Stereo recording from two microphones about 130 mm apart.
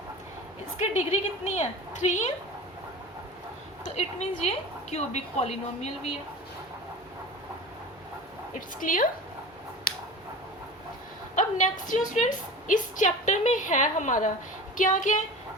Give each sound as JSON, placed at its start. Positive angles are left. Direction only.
{"t": 0.8, "sound": "a woman's voice", "side_deg": 65}
{"t": 3.8, "sound": "a woman's voice", "side_deg": 55}
{"t": 8.8, "sound": "a woman's voice", "side_deg": 90}
{"t": 9.9, "sound": "a sound", "side_deg": 90}
{"t": 11.3, "sound": "a woman's voice", "side_deg": 85}